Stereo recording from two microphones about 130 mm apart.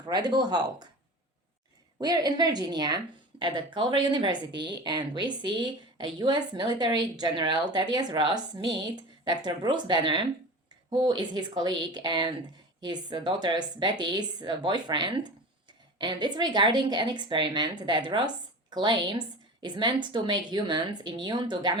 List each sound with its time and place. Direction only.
0.0 s a woman's voice: 35° right (ahead or behind)
2.0 s a woman's voice: 30° right (ahead or behind)